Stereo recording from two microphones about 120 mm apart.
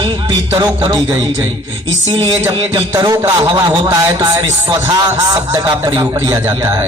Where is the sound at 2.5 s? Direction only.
45° right (ahead or behind).